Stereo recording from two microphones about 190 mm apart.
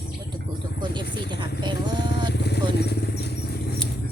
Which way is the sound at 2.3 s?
60° left (ahead or behind).